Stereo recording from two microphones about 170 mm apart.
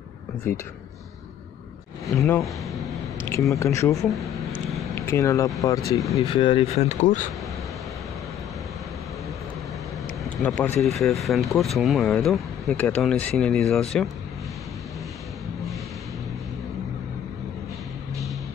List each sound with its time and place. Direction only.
0.5 s speech: 15° left (ahead or behind)
3.3 s speech: 20° left (ahead or behind)
4.0 s a sound: centre (ahead or behind)
4.9 s speech: 15° left (ahead or behind)
6.1 s speech: 30° left (ahead or behind)
10.4 s speech: 10° left (ahead or behind)